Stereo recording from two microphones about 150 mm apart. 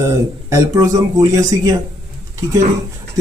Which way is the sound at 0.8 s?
20° right (ahead or behind).